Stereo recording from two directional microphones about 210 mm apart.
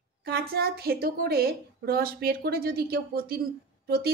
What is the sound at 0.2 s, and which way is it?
A woman's voice, 50° right (ahead or behind).